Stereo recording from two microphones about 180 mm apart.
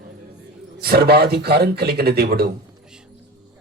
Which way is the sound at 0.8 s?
60° right (ahead or behind).